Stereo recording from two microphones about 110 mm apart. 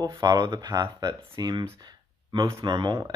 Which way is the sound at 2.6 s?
45° right (ahead or behind).